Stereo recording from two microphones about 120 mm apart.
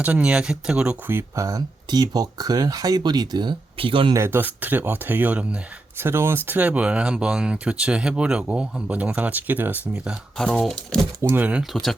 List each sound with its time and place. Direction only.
0.0 s speech: 10° right (ahead or behind); by 3.5 s 35° right (ahead or behind)
3.8 s speech: 45° right (ahead or behind)
4.1 s speech: 20° right (ahead or behind)
10.3 s speech: 5° left (ahead or behind)
11.2 s speech: 15° right (ahead or behind)
11.6 s speech: centre (ahead or behind)